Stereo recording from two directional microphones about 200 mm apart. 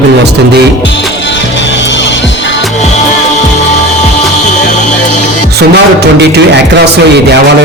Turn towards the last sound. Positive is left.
turn(degrees=-55)  # may be behind; listen again after turning